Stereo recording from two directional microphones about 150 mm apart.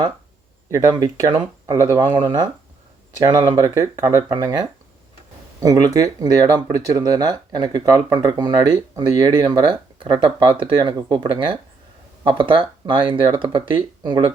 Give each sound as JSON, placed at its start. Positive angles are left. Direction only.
{"t": 0.7, "sound": "speech", "side_deg": -25}